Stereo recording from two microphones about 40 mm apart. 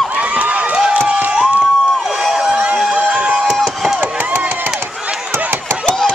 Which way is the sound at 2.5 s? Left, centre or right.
Right.